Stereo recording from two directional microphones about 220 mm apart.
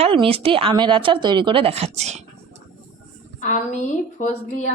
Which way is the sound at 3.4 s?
35° left (ahead or behind).